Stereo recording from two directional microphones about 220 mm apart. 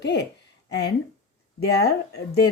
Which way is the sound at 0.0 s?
50° left (ahead or behind).